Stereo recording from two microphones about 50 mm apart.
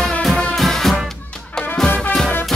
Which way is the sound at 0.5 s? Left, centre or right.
Centre.